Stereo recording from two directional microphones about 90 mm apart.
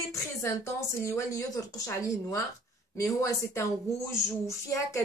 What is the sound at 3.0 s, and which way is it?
Speech, 30° left (ahead or behind).